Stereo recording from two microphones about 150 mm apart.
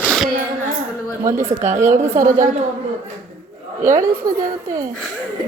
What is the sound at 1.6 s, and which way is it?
Speech, 55° right (ahead or behind).